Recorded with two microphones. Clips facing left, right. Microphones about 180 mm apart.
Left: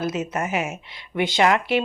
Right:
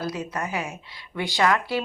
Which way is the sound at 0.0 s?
25° left (ahead or behind).